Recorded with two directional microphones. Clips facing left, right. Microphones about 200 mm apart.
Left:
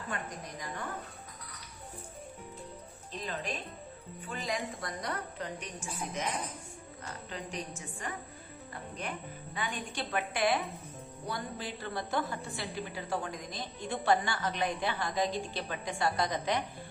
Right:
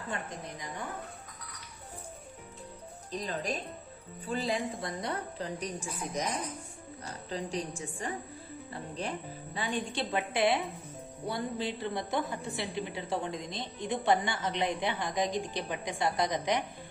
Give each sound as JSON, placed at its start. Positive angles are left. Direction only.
{"t": 0.1, "sound": "a woman's voice", "side_deg": -25}
{"t": 3.1, "sound": "a woman's voice", "side_deg": -40}